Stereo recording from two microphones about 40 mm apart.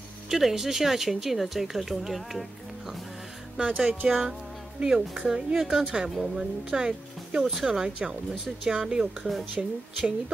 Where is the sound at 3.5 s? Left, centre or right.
Right.